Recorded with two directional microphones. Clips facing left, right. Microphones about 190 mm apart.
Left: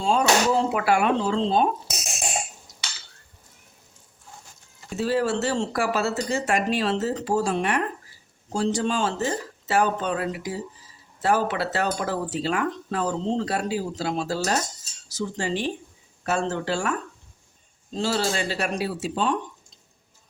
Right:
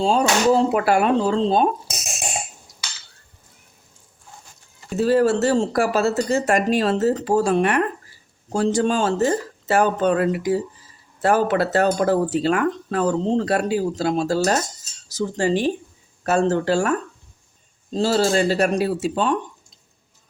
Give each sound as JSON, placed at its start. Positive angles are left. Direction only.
{"t": 0.0, "sound": "speech", "side_deg": -35}
{"t": 4.9, "sound": "speech", "side_deg": -45}